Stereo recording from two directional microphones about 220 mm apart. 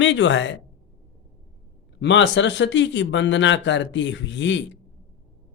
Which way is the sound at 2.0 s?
55° left (ahead or behind).